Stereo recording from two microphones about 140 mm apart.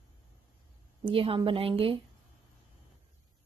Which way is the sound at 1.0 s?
40° right (ahead or behind).